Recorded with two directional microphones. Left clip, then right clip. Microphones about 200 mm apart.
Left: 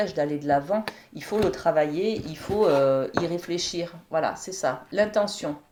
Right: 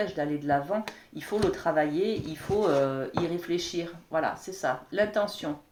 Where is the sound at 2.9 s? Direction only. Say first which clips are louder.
Left 6 dB; 40° left (ahead or behind).